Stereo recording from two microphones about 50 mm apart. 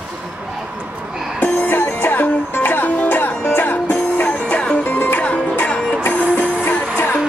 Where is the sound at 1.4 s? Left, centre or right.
Left.